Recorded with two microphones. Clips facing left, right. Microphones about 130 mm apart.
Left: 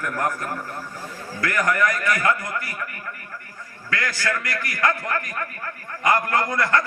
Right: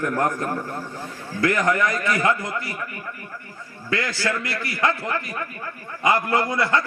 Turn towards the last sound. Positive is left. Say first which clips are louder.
# even
turn(degrees=-15)  # may be behind; listen again after turning